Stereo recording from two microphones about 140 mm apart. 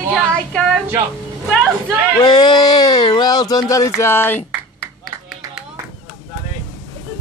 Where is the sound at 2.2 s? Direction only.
30° left (ahead or behind).